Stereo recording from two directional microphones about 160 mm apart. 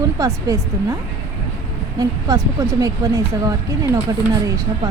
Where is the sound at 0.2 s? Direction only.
20° right (ahead or behind).